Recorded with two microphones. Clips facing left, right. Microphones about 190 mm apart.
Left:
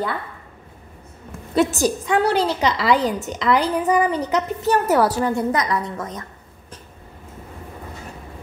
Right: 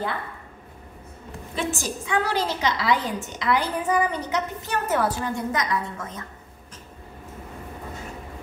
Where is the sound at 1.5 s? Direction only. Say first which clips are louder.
Left 10 dB; 40° left (ahead or behind).